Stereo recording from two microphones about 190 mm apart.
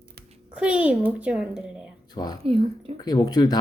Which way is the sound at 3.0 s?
20° left (ahead or behind).